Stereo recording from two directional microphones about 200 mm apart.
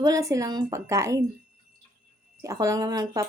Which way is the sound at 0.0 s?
15° right (ahead or behind).